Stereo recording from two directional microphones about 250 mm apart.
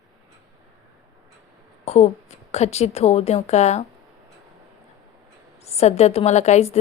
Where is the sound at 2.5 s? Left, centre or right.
Left.